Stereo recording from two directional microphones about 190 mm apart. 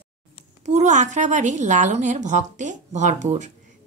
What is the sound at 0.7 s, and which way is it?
A woman's voice, 40° right (ahead or behind).